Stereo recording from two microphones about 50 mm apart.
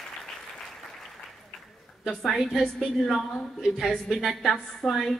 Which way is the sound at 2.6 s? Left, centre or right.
Centre.